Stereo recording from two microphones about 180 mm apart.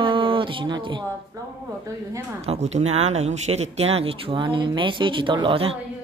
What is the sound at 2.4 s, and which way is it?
Speech, 35° right (ahead or behind).